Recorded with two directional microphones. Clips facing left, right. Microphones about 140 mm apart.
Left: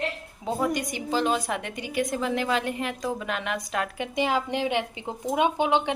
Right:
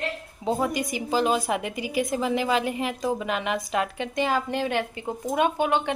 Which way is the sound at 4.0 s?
15° left (ahead or behind).